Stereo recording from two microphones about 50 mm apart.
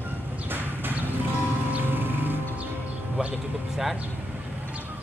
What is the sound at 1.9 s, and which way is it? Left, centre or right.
Music, right.